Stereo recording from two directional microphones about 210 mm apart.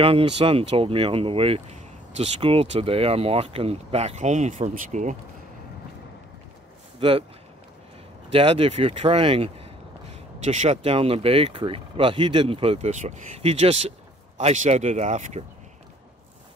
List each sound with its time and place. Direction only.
0.0 s speech: 25° right (ahead or behind)
7.0 s speech: 25° right (ahead or behind)
8.3 s speech: 25° right (ahead or behind)